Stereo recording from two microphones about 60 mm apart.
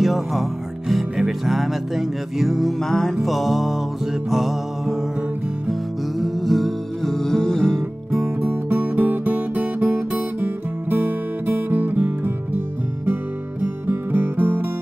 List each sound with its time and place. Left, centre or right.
0.0 s music: centre
8.4 s music: right